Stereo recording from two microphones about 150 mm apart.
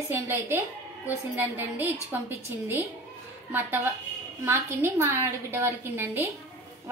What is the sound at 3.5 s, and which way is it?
A woman's voice, 15° right (ahead or behind).